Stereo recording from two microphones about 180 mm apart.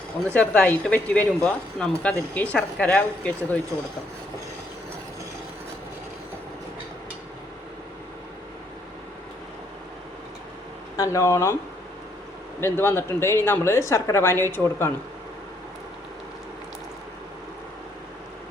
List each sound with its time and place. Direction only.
0.3 s a woman's voice: 5° left (ahead or behind)
10.9 s speech: 20° left (ahead or behind)
12.5 s a woman's voice: 15° left (ahead or behind)